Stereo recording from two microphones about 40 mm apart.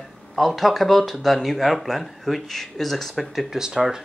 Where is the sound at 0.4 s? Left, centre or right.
Centre.